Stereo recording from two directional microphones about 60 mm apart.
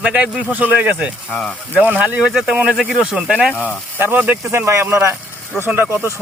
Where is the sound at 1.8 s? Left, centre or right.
Right.